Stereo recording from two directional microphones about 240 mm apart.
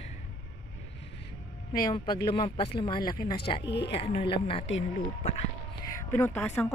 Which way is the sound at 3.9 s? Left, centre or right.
Left.